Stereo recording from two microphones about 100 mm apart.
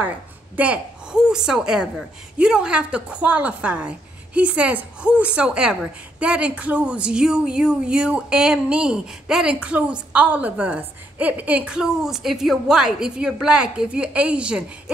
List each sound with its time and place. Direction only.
0.6 s a woman's voice: 10° right (ahead or behind)